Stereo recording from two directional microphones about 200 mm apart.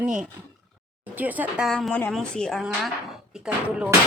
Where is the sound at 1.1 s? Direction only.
10° right (ahead or behind).